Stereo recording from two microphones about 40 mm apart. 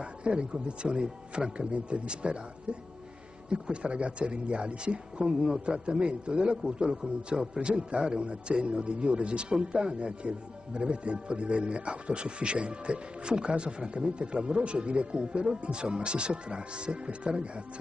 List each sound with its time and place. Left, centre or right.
0.0 s a man's voice: right
3.4 s a man's voice: right